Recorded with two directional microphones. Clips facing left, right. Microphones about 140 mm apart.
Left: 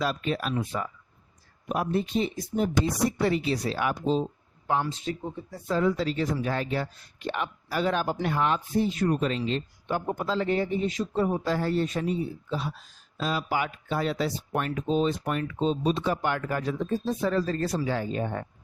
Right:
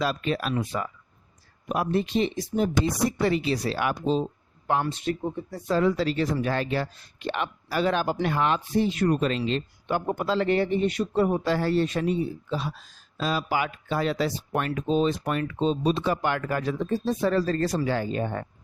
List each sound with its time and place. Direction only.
0.0 s speech: 90° right; by 4.2 s 70° right (ahead or behind)
4.6 s speech: 60° right (ahead or behind)